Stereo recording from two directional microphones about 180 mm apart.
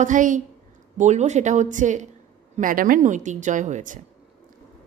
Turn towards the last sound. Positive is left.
turn(degrees=-45)  # may be behind; listen again after turning